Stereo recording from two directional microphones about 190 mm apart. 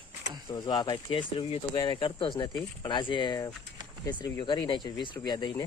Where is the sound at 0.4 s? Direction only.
20° left (ahead or behind).